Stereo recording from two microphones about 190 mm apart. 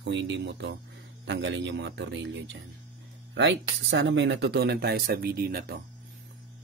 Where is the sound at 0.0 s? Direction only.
70° right (ahead or behind).